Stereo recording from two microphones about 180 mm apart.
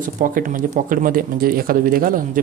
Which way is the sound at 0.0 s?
50° right (ahead or behind).